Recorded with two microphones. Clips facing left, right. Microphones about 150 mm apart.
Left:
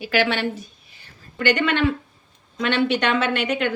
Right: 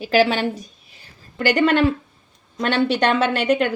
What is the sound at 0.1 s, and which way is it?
A woman's voice, 35° right (ahead or behind).